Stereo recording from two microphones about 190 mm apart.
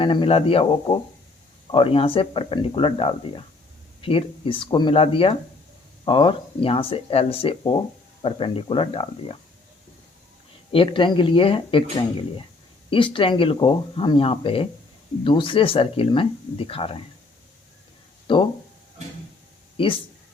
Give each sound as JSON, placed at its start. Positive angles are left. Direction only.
{"t": 0.0, "sound": "speech", "side_deg": 25}
{"t": 10.7, "sound": "speech", "side_deg": 25}
{"t": 13.1, "sound": "speech", "side_deg": 25}
{"t": 18.3, "sound": "speech", "side_deg": 25}
{"t": 19.7, "sound": "speech", "side_deg": 25}